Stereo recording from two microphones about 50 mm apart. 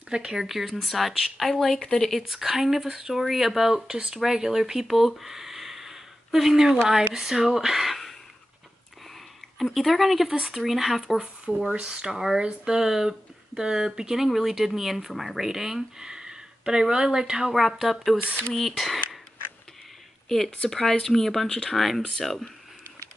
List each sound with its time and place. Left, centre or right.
0.1 s speech: centre
9.8 s speech: centre
11.1 s speech: centre
20.2 s speech: centre